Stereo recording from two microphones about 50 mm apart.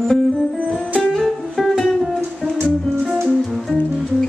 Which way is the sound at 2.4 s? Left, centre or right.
Centre.